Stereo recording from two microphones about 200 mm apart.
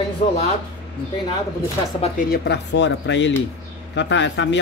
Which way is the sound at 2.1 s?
55° left (ahead or behind).